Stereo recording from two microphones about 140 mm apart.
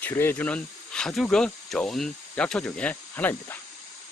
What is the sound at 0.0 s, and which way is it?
Speech, 15° left (ahead or behind).